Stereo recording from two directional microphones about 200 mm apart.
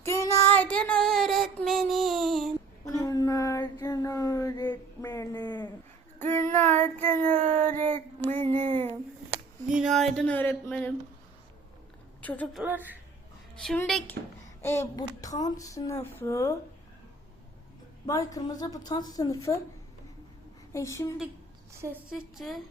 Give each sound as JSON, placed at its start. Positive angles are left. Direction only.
{"t": 0.0, "sound": "child singing", "side_deg": 15}
{"t": 3.0, "sound": "a sound", "side_deg": 15}
{"t": 6.1, "sound": "child singing", "side_deg": 10}
{"t": 9.3, "sound": "a sound", "side_deg": -5}
{"t": 12.2, "sound": "a woman's voice", "side_deg": 10}
{"t": 12.6, "sound": "speech", "side_deg": -10}
{"t": 13.7, "sound": "a woman's voice", "side_deg": 0}
{"t": 18.0, "sound": "a woman's voice", "side_deg": 15}
{"t": 20.7, "sound": "speech", "side_deg": 15}
{"t": 21.8, "sound": "a woman's voice", "side_deg": -10}